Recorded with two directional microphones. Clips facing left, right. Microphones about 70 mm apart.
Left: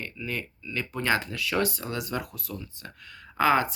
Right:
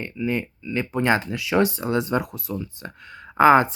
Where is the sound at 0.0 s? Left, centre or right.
Right.